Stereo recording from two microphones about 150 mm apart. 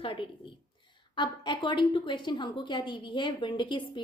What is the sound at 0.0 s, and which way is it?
A woman's voice, 35° left (ahead or behind).